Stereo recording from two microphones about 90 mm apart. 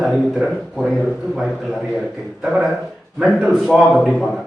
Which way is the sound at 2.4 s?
5° right (ahead or behind).